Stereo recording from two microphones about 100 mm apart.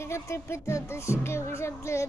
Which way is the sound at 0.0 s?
25° left (ahead or behind).